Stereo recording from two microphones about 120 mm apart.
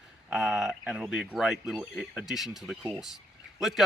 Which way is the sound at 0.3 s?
10° right (ahead or behind).